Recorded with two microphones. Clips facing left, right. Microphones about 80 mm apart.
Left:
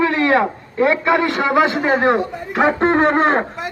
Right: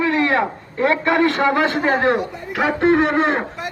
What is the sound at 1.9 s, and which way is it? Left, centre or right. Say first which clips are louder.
Speech: left 2 dB; left.